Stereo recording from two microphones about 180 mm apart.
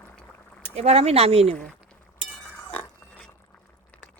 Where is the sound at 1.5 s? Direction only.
5° left (ahead or behind).